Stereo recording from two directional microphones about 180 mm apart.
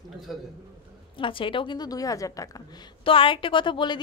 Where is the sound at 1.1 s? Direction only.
30° left (ahead or behind).